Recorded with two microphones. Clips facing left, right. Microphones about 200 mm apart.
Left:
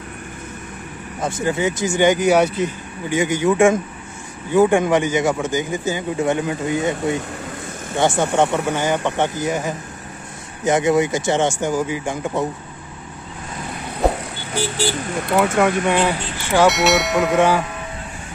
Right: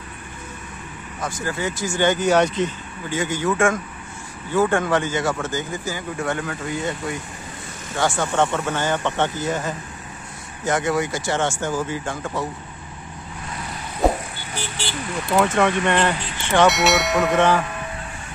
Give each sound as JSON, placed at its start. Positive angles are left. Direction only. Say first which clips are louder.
{"t": 1.2, "sound": "speech", "louder": "left 6 dB", "side_deg": 20}
{"t": 14.8, "sound": "speech", "louder": "left 6 dB", "side_deg": 45}
{"t": 15.3, "sound": "speech", "louder": "left 2 dB", "side_deg": 5}